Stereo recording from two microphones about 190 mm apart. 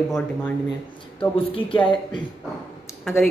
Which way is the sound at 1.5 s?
25° left (ahead or behind).